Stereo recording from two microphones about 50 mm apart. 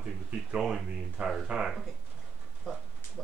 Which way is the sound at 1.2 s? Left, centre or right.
Right.